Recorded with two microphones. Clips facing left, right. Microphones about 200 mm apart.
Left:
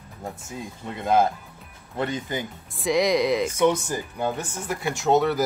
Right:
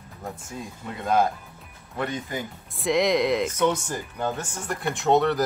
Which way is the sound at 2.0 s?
30° left (ahead or behind).